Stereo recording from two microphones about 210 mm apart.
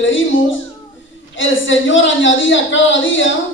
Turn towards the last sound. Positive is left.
turn(degrees=65)  # may be behind; listen again after turning